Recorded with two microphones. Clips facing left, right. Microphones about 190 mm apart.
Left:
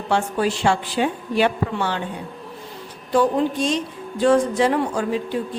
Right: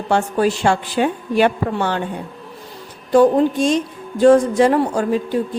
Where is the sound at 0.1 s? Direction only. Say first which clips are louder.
Right 4 dB; 45° right (ahead or behind).